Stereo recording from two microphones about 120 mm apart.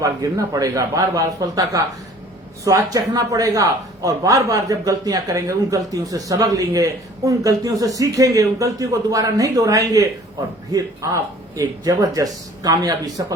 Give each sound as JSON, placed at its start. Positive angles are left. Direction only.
{"t": 0.0, "sound": "a man's voice", "side_deg": -30}